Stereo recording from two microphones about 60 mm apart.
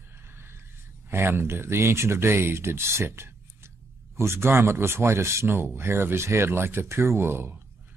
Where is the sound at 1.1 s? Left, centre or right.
Right.